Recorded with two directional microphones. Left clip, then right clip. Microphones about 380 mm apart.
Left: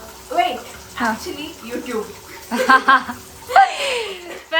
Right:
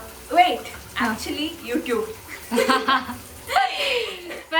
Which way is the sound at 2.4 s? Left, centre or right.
Centre.